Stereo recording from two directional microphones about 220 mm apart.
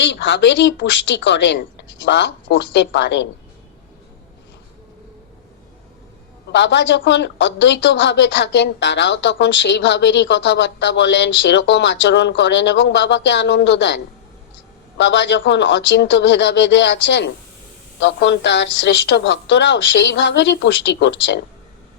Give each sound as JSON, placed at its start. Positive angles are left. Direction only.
{"t": 0.0, "sound": "a woman's voice", "side_deg": 55}
{"t": 6.5, "sound": "a woman's voice", "side_deg": 55}